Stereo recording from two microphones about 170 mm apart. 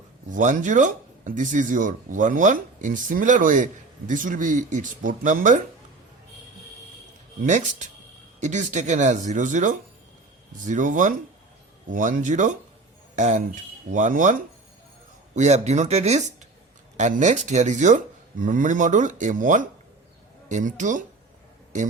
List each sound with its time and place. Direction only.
0.3 s speech: 50° right (ahead or behind)
7.4 s speech: 45° right (ahead or behind)